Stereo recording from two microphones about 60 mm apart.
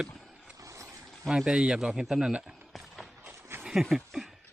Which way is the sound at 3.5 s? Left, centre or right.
Right.